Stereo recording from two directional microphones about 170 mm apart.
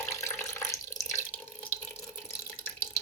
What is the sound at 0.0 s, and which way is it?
Water tap, 15° left (ahead or behind).